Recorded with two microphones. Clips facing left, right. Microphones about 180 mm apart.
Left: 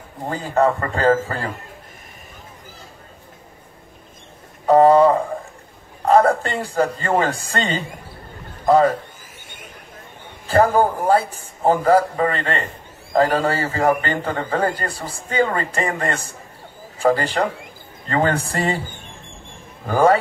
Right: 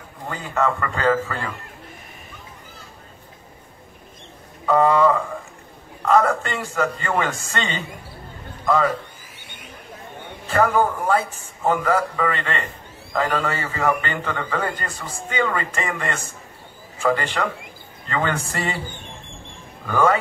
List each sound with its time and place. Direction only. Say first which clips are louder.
0.3 s a man's voice: left 5 dB; 35° left (ahead or behind)
4.6 s a man's voice: left 5 dB; 35° left (ahead or behind)
10.5 s a man's voice: left 3 dB; 35° left (ahead or behind)